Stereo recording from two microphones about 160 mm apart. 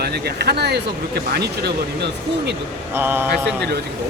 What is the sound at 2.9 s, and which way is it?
Speech, 10° right (ahead or behind).